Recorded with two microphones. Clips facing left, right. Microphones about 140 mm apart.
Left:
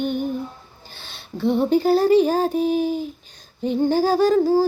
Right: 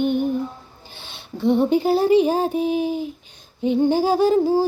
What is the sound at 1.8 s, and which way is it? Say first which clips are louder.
Music: left 1 dB; 15° right (ahead or behind).